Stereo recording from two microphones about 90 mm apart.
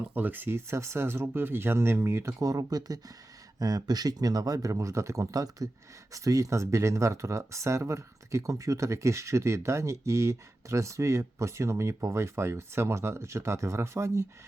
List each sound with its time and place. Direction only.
0.1 s speech: 20° right (ahead or behind)